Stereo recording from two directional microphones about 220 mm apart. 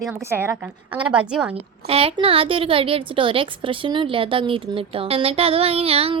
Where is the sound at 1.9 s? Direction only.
25° right (ahead or behind).